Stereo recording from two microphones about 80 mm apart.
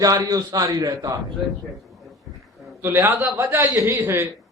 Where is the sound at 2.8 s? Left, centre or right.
Right.